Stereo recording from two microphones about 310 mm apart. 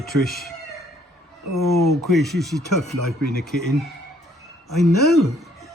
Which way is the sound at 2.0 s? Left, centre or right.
Centre.